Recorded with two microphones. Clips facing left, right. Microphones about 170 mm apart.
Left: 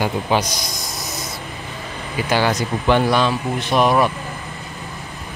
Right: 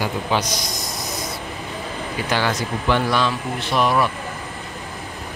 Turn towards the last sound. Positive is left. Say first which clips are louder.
# left 3 dB
turn(degrees=20)  # may be behind; listen again after turning